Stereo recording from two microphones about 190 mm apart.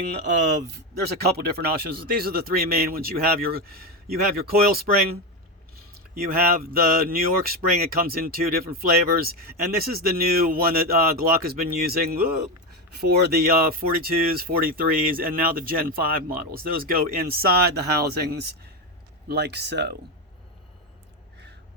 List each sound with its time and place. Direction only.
1.2 s speech: 55° right (ahead or behind)
6.1 s speech: 50° right (ahead or behind)